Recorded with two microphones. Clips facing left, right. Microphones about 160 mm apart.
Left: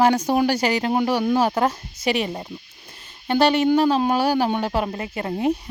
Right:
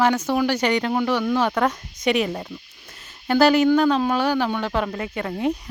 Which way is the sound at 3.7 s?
35° left (ahead or behind).